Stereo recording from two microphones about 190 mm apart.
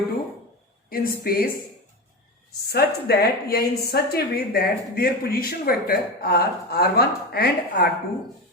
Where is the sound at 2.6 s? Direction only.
55° left (ahead or behind).